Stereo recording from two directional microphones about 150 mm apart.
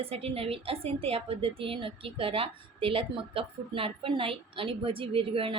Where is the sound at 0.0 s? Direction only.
40° right (ahead or behind).